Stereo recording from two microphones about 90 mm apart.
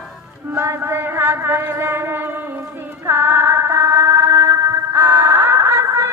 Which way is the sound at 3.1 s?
25° right (ahead or behind).